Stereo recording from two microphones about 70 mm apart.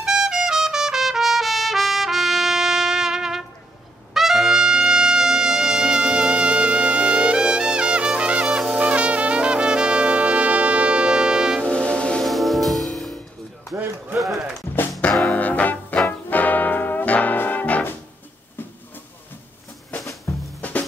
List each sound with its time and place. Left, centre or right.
0.0 s trumpet: centre
8.5 s brass instrument: centre
8.7 s brass instrument: centre
11.6 s train: centre
12.2 s music: centre
15.0 s music: centre
16.1 s brass instrument: left
18.6 s train: left
20.3 s music: left